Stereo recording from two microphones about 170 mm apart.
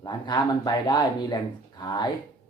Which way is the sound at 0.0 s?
25° left (ahead or behind).